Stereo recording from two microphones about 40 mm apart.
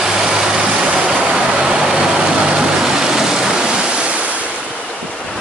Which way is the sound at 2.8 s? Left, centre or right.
Centre.